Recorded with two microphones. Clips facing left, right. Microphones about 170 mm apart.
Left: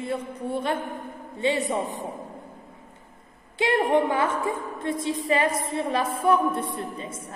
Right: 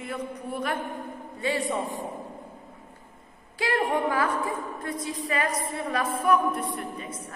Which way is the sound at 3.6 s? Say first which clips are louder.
Left 4 dB; 20° left (ahead or behind).